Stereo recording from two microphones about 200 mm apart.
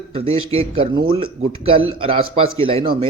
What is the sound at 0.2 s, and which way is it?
Speech, 30° right (ahead or behind).